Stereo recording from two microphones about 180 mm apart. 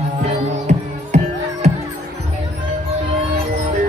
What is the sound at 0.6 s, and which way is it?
Music, 40° right (ahead or behind).